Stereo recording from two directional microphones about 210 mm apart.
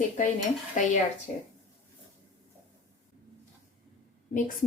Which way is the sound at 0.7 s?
35° left (ahead or behind).